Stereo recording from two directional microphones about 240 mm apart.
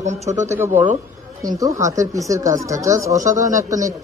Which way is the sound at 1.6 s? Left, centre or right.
Centre.